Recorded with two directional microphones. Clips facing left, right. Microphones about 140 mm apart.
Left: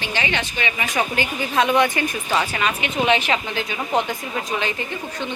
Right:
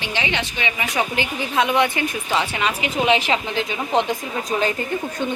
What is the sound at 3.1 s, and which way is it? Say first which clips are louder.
Speech: right 1 dB; 30° right (ahead or behind).